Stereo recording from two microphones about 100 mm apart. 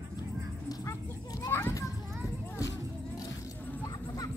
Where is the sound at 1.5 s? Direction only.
25° left (ahead or behind).